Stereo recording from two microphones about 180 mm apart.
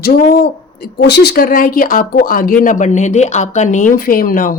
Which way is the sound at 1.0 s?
65° left (ahead or behind).